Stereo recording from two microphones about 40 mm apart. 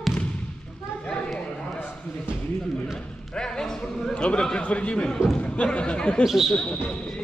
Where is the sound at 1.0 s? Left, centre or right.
Left.